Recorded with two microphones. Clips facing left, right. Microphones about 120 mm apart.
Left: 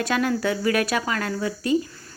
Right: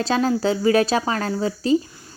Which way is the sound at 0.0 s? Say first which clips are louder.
Right 3 dB; 30° right (ahead or behind).